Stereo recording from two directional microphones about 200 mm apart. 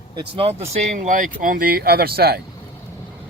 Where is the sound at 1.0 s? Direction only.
40° right (ahead or behind).